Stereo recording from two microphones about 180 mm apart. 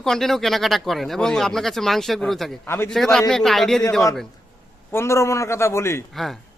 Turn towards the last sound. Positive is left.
turn(degrees=0)  # may be behind; listen again after turning